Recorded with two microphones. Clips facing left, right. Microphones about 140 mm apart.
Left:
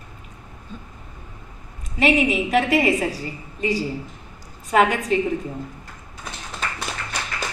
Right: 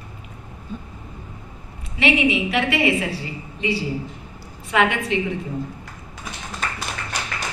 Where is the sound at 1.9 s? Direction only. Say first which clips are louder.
Left 1 dB; 45° left (ahead or behind).